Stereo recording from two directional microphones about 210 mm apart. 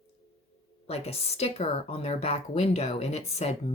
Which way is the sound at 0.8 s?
30° left (ahead or behind).